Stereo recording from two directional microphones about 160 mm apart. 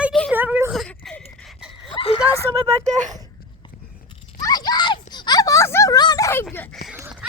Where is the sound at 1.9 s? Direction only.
35° left (ahead or behind).